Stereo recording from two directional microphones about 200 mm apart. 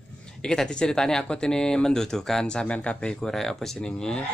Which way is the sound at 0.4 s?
5° left (ahead or behind).